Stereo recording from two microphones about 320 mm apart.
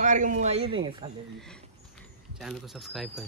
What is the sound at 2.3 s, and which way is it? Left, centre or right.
Speech, centre.